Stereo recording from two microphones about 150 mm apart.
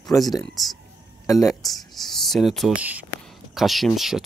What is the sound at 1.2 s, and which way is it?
Speech, 20° left (ahead or behind).